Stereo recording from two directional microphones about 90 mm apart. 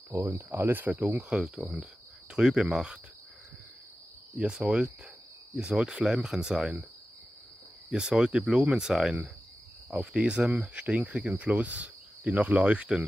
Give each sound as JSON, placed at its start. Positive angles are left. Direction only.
{"t": 0.1, "sound": "speech", "side_deg": -30}
{"t": 1.3, "sound": "speech", "side_deg": 0}
{"t": 4.4, "sound": "speech", "side_deg": -10}
{"t": 7.9, "sound": "speech", "side_deg": -10}